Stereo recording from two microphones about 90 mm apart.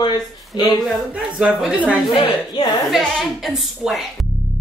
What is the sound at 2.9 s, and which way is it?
A woman's voice, centre (ahead or behind).